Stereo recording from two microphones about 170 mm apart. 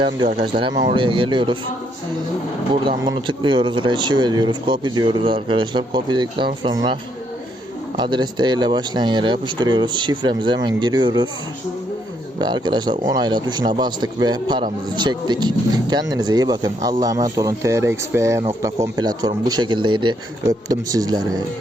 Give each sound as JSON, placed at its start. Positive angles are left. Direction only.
{"t": 0.5, "sound": "speech", "side_deg": -25}
{"t": 2.8, "sound": "speech", "side_deg": -25}
{"t": 12.4, "sound": "speech", "side_deg": -25}